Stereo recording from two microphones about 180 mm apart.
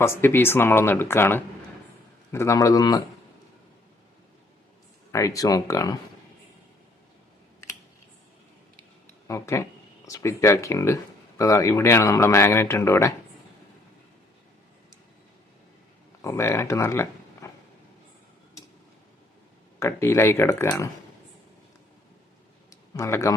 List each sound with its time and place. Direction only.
0.0 s a man's voice: 15° left (ahead or behind)
5.1 s speech: 15° left (ahead or behind)
9.2 s speech: 15° left (ahead or behind)
16.2 s speech: 15° left (ahead or behind)
19.8 s speech: 15° left (ahead or behind)
22.7 s a sound: 15° left (ahead or behind)